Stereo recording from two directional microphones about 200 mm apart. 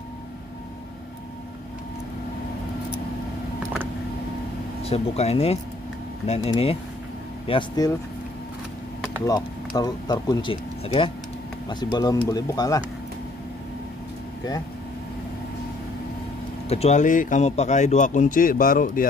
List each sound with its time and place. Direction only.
4.8 s speech: 30° left (ahead or behind)
9.2 s speech: 20° left (ahead or behind)
16.6 s speech: 30° left (ahead or behind)